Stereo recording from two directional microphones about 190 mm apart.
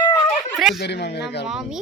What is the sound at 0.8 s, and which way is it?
Speech, 60° left (ahead or behind).